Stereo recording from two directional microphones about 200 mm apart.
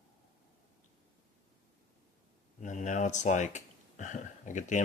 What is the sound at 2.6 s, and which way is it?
Speech, 40° left (ahead or behind).